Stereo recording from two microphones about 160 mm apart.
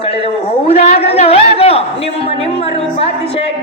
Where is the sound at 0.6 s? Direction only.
40° left (ahead or behind).